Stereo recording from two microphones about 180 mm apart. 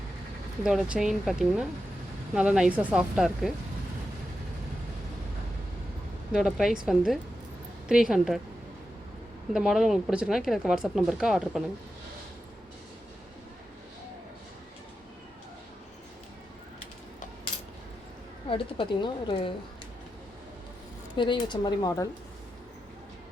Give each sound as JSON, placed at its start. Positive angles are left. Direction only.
{"t": 0.6, "sound": "speech", "side_deg": 0}
{"t": 6.3, "sound": "speech", "side_deg": 0}
{"t": 9.5, "sound": "speech", "side_deg": -5}
{"t": 18.4, "sound": "a woman's voice", "side_deg": 30}
{"t": 21.2, "sound": "a woman's voice", "side_deg": 25}